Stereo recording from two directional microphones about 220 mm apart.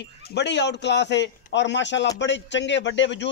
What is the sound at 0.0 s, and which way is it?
A man's voice, 50° left (ahead or behind).